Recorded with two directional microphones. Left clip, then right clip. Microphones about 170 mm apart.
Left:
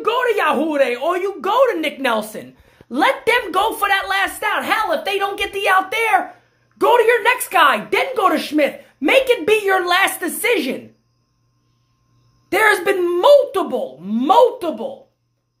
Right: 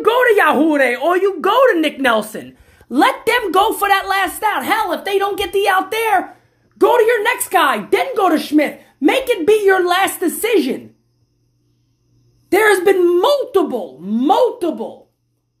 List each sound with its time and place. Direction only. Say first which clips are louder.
0.0 s a woman's voice: right 5 dB; 25° right (ahead or behind); by 10.8 s 10° right (ahead or behind)
12.4 s a woman's voice: right 3 dB; 10° right (ahead or behind)